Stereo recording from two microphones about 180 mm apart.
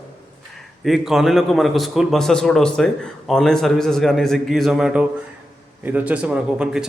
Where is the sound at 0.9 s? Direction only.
Centre (ahead or behind).